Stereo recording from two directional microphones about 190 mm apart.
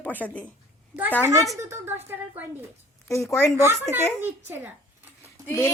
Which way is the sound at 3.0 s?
15° left (ahead or behind).